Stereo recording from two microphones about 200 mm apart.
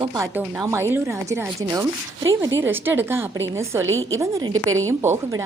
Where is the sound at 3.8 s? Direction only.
80° right.